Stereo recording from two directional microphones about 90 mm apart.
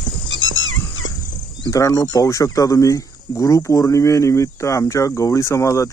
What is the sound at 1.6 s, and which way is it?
Speech, 40° left (ahead or behind).